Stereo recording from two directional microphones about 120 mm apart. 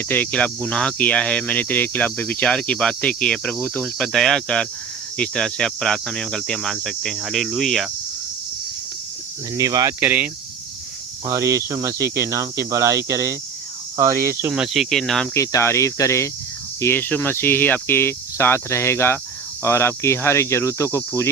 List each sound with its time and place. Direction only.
0.1 s speech: 15° left (ahead or behind)
9.6 s speech: 30° right (ahead or behind)
10.0 s speech: 15° right (ahead or behind)
11.3 s speech: 25° right (ahead or behind)
14.5 s speech: 5° right (ahead or behind)
15.4 s cricket: 25° left (ahead or behind)